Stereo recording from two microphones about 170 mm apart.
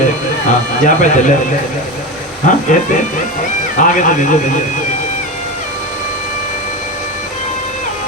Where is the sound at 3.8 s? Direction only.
50° left (ahead or behind).